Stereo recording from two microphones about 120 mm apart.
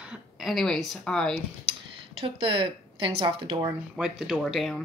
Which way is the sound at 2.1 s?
50° right (ahead or behind).